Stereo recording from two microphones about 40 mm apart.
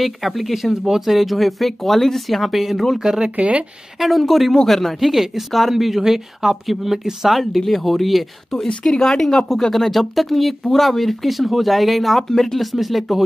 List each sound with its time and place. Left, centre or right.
0.0 s speech: centre
3.0 s speech: centre
3.3 s speech: right
4.0 s speech: centre